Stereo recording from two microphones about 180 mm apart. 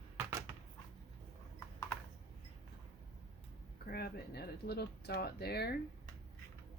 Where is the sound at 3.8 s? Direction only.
60° left (ahead or behind).